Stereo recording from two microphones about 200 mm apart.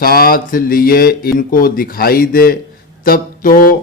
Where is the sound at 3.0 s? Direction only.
45° left (ahead or behind).